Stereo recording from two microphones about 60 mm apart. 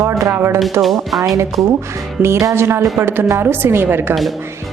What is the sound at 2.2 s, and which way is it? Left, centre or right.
A woman's voice, right.